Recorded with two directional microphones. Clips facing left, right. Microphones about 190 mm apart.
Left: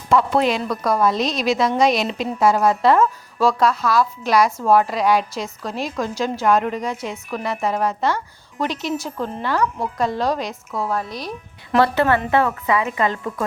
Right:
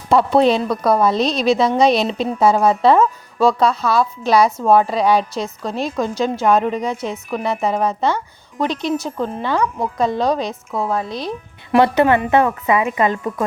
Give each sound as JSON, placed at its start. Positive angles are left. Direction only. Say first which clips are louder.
{"t": 0.1, "sound": "a woman's voice", "louder": "right 4 dB", "side_deg": -30}